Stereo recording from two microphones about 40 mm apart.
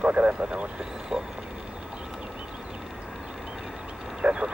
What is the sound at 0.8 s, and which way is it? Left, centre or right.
Speech, centre.